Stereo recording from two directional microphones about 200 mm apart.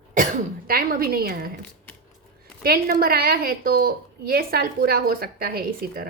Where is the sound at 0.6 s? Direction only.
45° right (ahead or behind).